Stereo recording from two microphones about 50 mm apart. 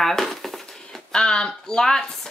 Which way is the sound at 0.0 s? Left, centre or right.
Centre.